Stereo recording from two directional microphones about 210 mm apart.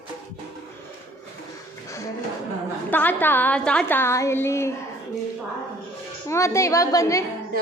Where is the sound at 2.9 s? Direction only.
10° left (ahead or behind).